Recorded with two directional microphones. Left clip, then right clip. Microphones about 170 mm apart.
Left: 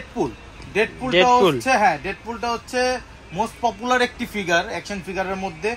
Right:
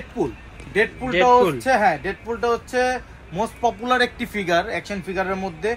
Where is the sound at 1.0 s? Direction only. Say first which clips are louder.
Left 1 dB; 15° left (ahead or behind).